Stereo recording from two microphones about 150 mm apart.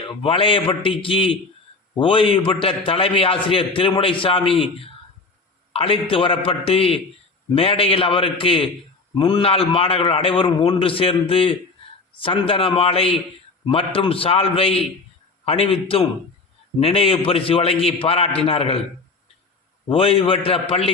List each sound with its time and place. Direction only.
0.0 s a man's voice: 35° left (ahead or behind)
19.9 s a man's voice: 40° left (ahead or behind)